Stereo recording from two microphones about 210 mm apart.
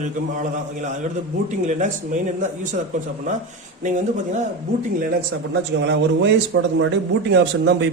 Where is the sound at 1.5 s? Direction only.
35° right (ahead or behind).